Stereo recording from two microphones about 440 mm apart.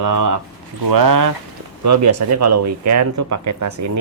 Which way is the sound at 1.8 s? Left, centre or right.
Right.